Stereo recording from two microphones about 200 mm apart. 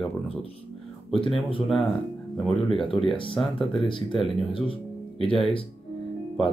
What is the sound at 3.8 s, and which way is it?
Speech, 25° left (ahead or behind).